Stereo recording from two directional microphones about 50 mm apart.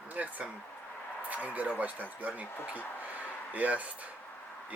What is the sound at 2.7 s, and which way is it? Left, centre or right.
Speech, left.